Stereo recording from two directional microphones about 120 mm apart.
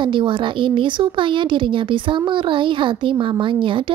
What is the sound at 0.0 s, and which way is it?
Speech, 40° right (ahead or behind).